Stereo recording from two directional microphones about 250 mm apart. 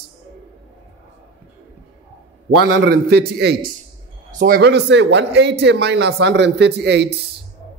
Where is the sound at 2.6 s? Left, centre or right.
Right.